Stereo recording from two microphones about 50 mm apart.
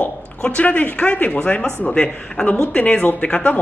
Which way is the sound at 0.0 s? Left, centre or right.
Left.